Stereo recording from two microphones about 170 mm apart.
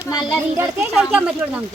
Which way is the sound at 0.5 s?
15° right (ahead or behind).